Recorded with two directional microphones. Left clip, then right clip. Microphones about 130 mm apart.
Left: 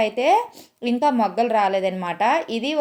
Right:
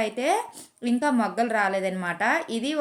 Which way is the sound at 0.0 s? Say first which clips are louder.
Left 7 dB; 20° left (ahead or behind).